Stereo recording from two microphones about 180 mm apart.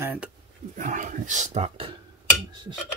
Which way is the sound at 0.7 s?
45° right (ahead or behind).